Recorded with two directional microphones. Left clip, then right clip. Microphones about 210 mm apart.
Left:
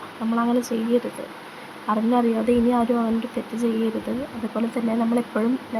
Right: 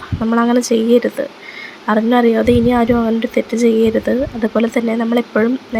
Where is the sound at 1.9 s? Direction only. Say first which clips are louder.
Right 8 dB; 15° right (ahead or behind).